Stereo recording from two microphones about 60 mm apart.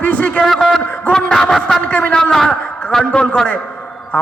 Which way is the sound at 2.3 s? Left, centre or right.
Centre.